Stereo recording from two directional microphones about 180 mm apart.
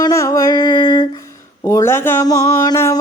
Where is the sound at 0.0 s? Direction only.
15° left (ahead or behind).